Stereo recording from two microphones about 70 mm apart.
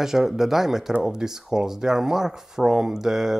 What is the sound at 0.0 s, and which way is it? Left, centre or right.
Speech, centre.